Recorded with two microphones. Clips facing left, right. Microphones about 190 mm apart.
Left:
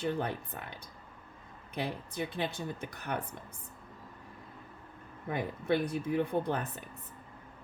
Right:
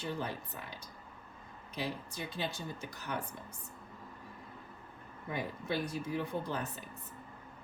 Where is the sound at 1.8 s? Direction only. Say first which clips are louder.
Left 4 dB; 55° left (ahead or behind).